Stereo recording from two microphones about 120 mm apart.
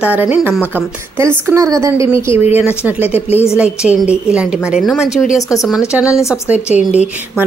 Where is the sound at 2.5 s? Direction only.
15° right (ahead or behind).